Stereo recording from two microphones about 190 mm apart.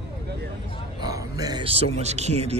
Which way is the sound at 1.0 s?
20° right (ahead or behind).